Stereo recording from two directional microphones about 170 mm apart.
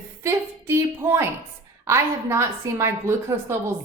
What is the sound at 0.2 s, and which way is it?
A woman's voice, 15° right (ahead or behind).